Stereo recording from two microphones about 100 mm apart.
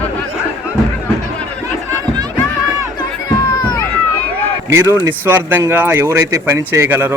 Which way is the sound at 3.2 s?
40° left (ahead or behind).